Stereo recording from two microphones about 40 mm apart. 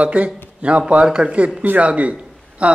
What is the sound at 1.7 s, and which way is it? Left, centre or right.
A man's voice, right.